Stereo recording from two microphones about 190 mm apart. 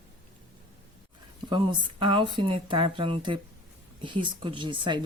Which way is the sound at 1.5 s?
25° right (ahead or behind).